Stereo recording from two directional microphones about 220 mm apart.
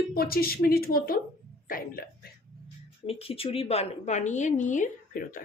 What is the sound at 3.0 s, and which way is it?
A woman's voice, 25° left (ahead or behind).